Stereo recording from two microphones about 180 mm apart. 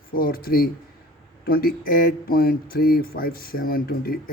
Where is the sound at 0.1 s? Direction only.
55° left (ahead or behind).